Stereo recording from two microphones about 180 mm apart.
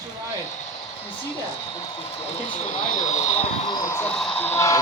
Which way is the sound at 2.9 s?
40° left (ahead or behind).